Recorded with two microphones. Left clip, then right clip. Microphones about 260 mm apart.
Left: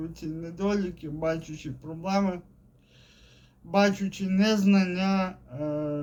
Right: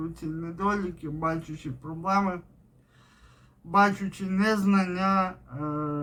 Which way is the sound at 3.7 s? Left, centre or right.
Centre.